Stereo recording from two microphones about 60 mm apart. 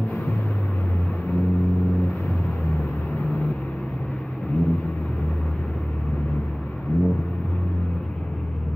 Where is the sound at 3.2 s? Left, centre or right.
Centre.